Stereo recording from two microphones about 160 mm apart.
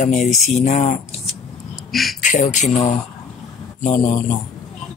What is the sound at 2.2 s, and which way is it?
Speech, 50° left (ahead or behind).